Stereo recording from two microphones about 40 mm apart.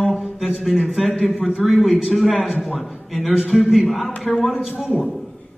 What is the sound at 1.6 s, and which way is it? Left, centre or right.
A man's voice, centre.